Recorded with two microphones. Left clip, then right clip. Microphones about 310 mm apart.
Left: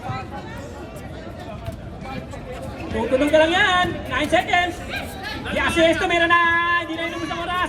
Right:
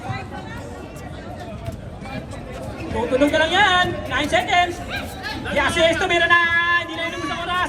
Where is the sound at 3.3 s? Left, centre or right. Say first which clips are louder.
Left 2 dB; right.